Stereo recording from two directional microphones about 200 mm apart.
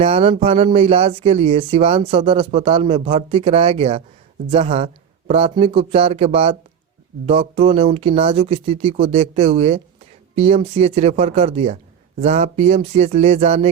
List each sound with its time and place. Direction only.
0.0 s speech: 30° right (ahead or behind)